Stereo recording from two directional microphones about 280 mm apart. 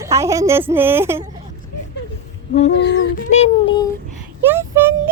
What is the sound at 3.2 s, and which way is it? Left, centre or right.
Speech, left.